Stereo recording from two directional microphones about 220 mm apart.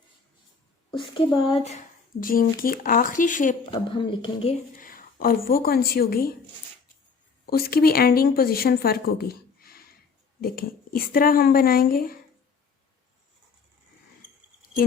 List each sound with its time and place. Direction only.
0.9 s speech: 20° left (ahead or behind)
2.2 s a woman's voice: 40° left (ahead or behind)
3.7 s speech: 20° left (ahead or behind)
4.8 s speech: 40° left (ahead or behind)
7.4 s a woman's voice: 45° left (ahead or behind)